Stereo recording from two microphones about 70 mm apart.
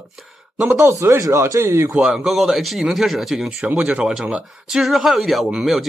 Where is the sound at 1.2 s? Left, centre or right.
Right.